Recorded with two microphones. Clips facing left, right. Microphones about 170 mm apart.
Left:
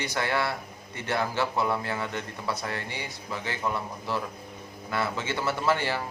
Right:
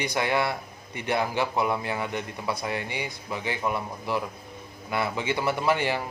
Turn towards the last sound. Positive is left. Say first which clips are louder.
# right 2 dB
turn(degrees=-15)  # may be behind; listen again after turning